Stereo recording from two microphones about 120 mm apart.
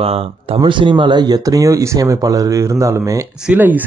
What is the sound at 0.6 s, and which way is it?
Speech, 40° right (ahead or behind).